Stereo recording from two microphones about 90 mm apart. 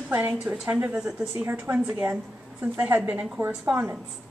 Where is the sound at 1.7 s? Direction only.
20° right (ahead or behind).